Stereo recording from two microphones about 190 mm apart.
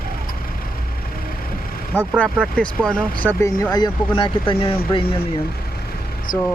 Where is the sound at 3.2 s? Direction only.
15° left (ahead or behind).